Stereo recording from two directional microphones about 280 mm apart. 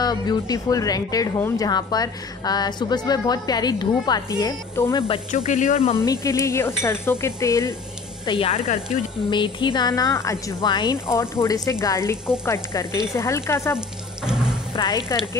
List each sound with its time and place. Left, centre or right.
0.0 s a woman's voice: centre
6.2 s a woman's voice: centre
8.3 s a woman's voice: centre
13.7 s music: centre
15.1 s a woman's voice: centre